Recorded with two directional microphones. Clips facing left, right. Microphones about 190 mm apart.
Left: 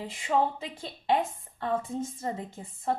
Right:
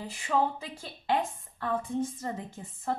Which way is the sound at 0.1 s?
20° left (ahead or behind).